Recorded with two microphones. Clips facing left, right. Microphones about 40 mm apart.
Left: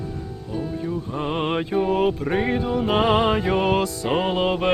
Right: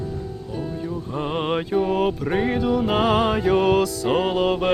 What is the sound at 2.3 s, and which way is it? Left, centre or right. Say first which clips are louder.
Music: even; centre.